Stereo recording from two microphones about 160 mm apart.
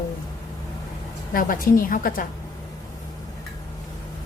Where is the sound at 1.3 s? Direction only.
60° left (ahead or behind).